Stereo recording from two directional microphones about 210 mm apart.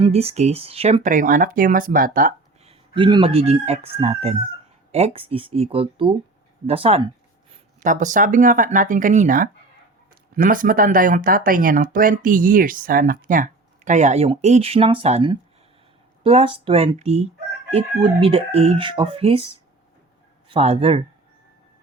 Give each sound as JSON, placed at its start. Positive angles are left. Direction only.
{"t": 0.0, "sound": "speech", "side_deg": -30}
{"t": 2.6, "sound": "speech", "side_deg": -25}
{"t": 7.8, "sound": "speech", "side_deg": -35}
{"t": 20.5, "sound": "speech", "side_deg": -30}